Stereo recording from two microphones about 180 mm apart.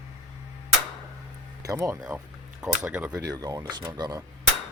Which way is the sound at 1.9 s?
5° right (ahead or behind).